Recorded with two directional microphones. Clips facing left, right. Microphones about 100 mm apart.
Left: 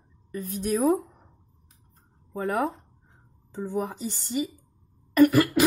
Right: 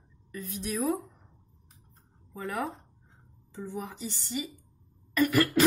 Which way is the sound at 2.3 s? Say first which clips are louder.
Left 7 dB; 50° left (ahead or behind).